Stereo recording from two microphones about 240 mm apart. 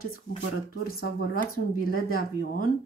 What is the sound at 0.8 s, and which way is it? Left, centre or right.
Speech, left.